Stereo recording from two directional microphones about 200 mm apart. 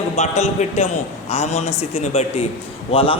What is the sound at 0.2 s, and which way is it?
A man's voice, 35° left (ahead or behind).